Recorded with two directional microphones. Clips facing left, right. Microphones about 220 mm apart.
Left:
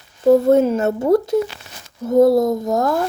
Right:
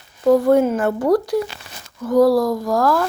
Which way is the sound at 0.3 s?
25° left (ahead or behind).